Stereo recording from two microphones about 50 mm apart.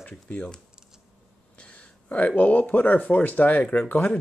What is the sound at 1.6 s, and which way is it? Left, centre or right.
Speech, left.